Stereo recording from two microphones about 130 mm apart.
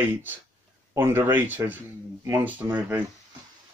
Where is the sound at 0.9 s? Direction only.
15° right (ahead or behind).